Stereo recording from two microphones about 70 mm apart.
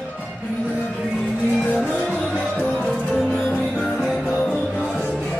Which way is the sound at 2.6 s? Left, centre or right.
Centre.